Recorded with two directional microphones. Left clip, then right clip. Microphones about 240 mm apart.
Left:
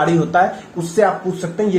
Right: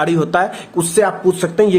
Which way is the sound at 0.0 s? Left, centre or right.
Right.